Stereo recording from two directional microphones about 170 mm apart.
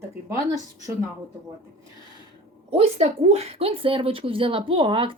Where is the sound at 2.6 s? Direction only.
35° right (ahead or behind).